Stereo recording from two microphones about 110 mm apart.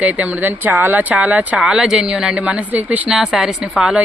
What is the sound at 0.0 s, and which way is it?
Speech, 10° right (ahead or behind).